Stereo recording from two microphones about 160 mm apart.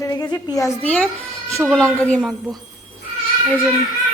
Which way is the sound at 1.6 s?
Centre (ahead or behind).